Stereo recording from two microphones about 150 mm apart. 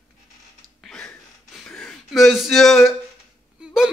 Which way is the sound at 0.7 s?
5° left (ahead or behind).